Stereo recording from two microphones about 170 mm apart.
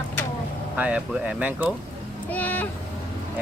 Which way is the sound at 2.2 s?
10° left (ahead or behind).